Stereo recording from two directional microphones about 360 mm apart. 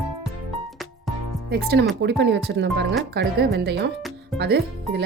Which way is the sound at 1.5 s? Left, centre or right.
Right.